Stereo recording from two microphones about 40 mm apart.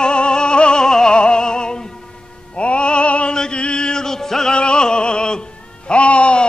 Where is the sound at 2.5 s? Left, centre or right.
Left; by 4.5 s centre.